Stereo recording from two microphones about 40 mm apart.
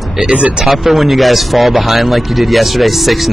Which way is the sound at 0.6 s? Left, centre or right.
Centre.